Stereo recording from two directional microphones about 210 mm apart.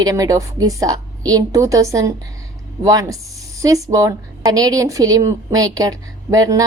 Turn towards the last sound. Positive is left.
turn(degrees=-15)  # may be behind; listen again after turning